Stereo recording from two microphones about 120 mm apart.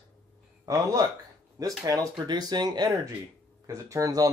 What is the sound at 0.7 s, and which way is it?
Speech, 30° right (ahead or behind).